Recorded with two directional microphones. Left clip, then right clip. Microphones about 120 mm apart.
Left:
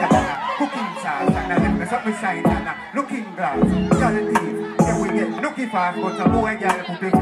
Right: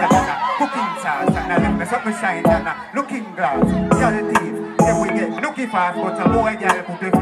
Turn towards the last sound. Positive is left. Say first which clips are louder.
# right 2 dB
turn(degrees=-30)  # may be behind; listen again after turning